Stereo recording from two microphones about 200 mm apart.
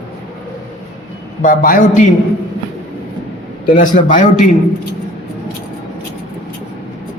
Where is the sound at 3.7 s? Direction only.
40° left (ahead or behind).